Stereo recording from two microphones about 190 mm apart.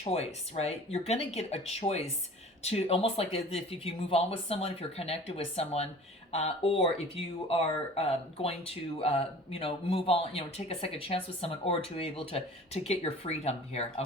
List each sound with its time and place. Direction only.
0.0 s speech: 35° left (ahead or behind)